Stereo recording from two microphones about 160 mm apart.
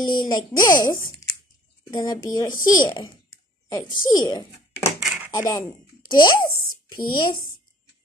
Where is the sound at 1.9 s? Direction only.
25° left (ahead or behind).